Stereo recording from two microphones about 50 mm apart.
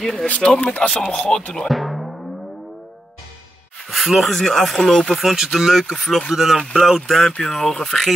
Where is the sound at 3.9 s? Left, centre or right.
Centre.